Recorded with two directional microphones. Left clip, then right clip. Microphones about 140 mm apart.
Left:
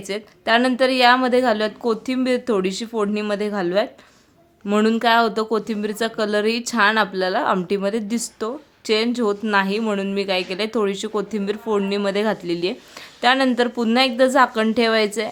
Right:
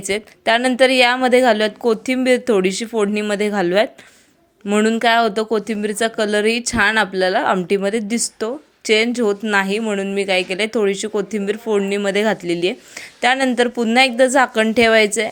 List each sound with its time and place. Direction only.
0.1 s a woman's voice: 20° right (ahead or behind)
4.6 s speech: 5° right (ahead or behind)
9.8 s speech: centre (ahead or behind)